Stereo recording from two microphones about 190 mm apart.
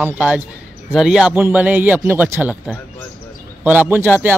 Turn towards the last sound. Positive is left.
turn(degrees=-10)  # may be behind; listen again after turning